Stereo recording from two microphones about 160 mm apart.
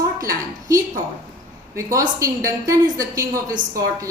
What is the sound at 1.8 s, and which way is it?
A woman's voice, 20° right (ahead or behind).